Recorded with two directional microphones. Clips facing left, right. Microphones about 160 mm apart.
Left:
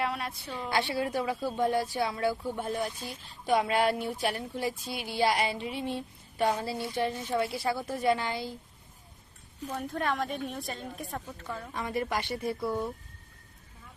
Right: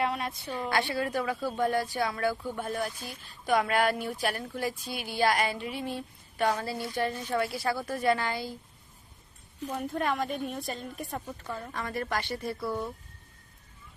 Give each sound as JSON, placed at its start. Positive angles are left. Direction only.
{"t": 0.0, "sound": "a woman's voice", "side_deg": 0}
{"t": 0.7, "sound": "speech", "side_deg": 20}
{"t": 6.4, "sound": "speech", "side_deg": 10}
{"t": 6.9, "sound": "speech", "side_deg": 20}
{"t": 9.6, "sound": "a woman's voice", "side_deg": -10}
{"t": 11.7, "sound": "speech", "side_deg": 15}